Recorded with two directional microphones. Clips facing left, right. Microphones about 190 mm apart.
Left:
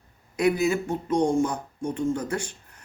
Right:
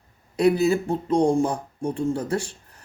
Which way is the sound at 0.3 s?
35° right (ahead or behind).